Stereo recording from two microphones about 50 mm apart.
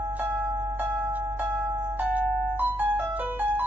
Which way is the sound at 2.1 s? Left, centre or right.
Right.